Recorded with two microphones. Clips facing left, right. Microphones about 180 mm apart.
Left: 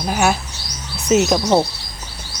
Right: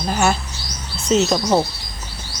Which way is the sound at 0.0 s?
10° left (ahead or behind).